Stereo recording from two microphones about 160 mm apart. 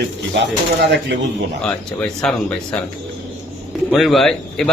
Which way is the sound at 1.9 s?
5° left (ahead or behind).